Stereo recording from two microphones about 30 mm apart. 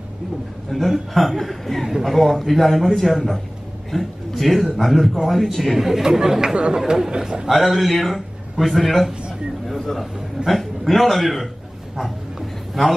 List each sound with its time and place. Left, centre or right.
0.7 s a man's voice: centre
5.8 s speech: centre
6.5 s speech: right
7.4 s speech: centre
9.7 s a sound: centre
9.9 s a man's voice: centre
12.8 s speech: centre